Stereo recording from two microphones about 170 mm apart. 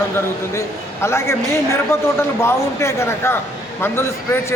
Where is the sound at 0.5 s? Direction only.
15° left (ahead or behind).